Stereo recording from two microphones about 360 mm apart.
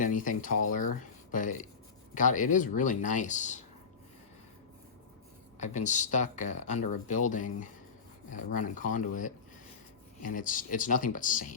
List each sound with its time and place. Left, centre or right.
0.0 s speech: left
5.5 s speech: centre
6.7 s speech: left
7.1 s speech: left
8.8 s speech: left